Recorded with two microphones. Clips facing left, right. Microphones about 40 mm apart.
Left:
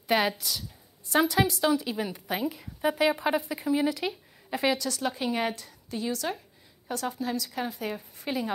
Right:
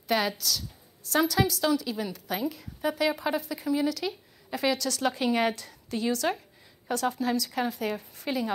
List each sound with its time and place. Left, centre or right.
0.1 s a woman's voice: centre